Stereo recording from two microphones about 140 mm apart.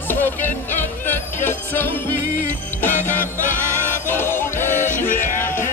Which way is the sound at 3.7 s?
15° left (ahead or behind).